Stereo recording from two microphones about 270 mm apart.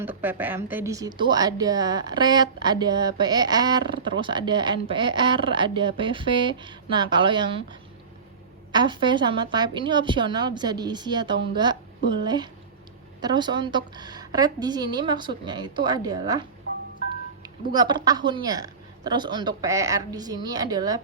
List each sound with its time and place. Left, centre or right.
0.0 s a woman's voice: centre
8.7 s a woman's voice: centre